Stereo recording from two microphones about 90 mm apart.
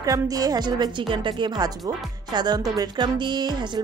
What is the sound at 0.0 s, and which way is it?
Speech, 40° right (ahead or behind).